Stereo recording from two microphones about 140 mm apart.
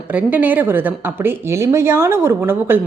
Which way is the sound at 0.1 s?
10° right (ahead or behind).